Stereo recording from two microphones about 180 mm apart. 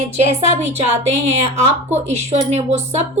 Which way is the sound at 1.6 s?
35° right (ahead or behind).